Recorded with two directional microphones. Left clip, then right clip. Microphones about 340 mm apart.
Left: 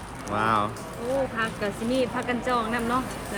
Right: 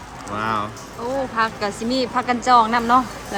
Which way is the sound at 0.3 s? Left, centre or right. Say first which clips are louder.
Right 1 dB; centre.